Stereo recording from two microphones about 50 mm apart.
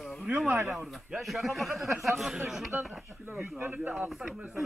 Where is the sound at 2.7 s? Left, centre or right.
Right.